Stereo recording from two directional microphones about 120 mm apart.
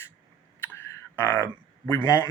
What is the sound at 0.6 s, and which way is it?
Clicking, 20° left (ahead or behind).